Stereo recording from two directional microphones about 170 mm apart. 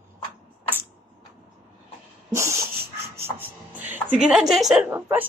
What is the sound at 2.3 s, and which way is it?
Dog, 15° right (ahead or behind).